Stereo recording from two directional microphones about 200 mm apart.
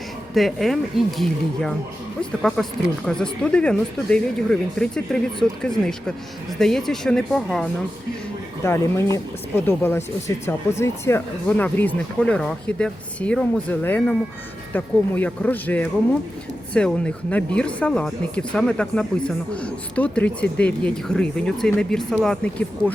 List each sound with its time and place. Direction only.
0.3 s speech: centre (ahead or behind)
3.1 s speech: 5° left (ahead or behind)
8.6 s speech: 15° left (ahead or behind)